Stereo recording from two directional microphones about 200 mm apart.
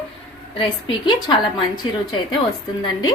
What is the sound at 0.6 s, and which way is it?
Speech, 25° left (ahead or behind).